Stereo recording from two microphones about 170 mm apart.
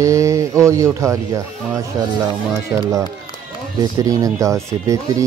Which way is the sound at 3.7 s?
20° right (ahead or behind).